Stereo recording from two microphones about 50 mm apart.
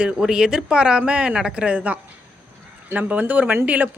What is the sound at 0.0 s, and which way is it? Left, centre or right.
Speech, centre.